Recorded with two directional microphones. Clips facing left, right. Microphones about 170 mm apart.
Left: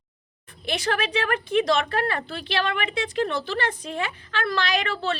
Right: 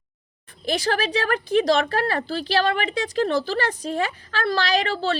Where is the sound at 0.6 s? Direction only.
35° right (ahead or behind).